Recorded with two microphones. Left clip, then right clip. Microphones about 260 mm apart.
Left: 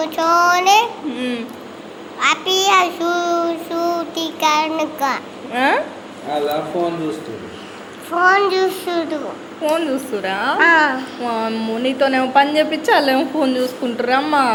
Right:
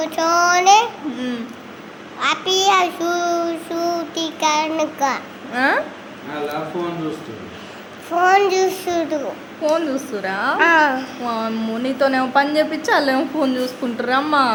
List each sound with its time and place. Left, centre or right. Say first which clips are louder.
0.0 s child singing: left 2 dB; centre
8.2 s a child's voice: left 1 dB; centre